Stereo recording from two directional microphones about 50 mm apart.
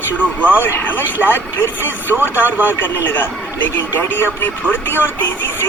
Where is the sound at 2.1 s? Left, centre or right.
Right.